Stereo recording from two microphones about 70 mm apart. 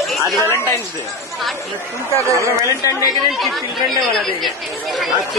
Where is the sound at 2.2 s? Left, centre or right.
Right.